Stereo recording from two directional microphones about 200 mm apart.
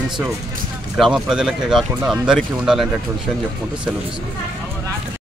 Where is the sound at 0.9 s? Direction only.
Centre (ahead or behind).